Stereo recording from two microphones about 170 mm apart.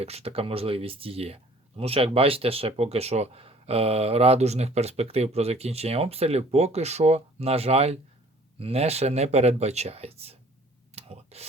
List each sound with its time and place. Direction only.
0.0 s speech: 35° right (ahead or behind)
10.9 s clicking: 35° right (ahead or behind)